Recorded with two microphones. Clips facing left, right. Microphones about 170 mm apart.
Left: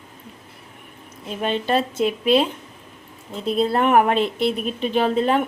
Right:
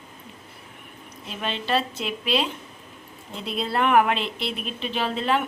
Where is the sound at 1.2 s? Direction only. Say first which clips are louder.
Left 6 dB; 45° left (ahead or behind).